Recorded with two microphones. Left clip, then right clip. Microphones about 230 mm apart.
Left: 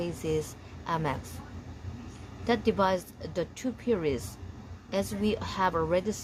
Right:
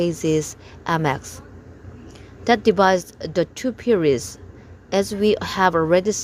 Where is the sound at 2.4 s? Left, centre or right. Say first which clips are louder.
Right 11 dB; right.